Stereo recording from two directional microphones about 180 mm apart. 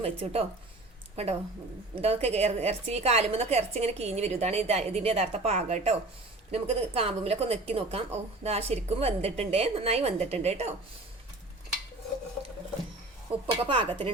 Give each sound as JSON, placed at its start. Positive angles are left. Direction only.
{"t": 0.0, "sound": "a woman's voice", "side_deg": -35}
{"t": 13.5, "sound": "speech", "side_deg": -25}